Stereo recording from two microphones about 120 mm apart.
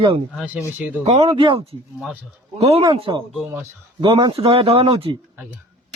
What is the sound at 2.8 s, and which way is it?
Speech, 40° right (ahead or behind).